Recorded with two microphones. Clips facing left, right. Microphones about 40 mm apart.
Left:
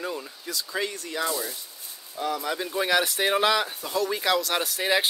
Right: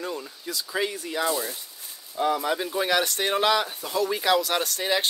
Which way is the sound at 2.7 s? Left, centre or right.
Centre.